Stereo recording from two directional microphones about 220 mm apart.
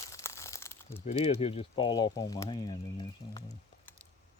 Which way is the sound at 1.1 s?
25° left (ahead or behind).